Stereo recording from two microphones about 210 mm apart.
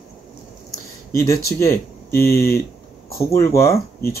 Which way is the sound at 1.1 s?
15° left (ahead or behind).